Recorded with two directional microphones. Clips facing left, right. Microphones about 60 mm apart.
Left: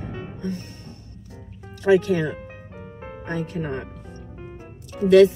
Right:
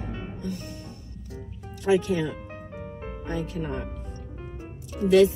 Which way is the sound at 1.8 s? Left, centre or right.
Left.